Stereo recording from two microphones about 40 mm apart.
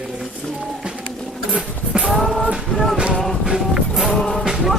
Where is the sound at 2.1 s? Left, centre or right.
Centre.